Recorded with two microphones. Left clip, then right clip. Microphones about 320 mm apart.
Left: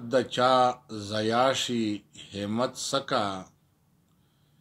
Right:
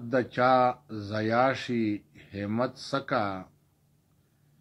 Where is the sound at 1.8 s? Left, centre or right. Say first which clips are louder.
Right 1 dB; left.